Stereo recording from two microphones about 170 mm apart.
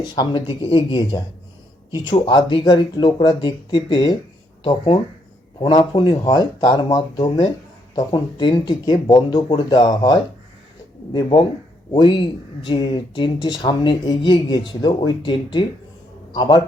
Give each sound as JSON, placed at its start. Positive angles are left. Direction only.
{"t": 0.0, "sound": "speech", "side_deg": 25}